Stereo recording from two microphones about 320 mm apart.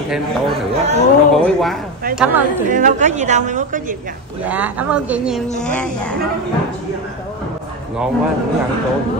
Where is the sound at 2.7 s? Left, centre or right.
Right.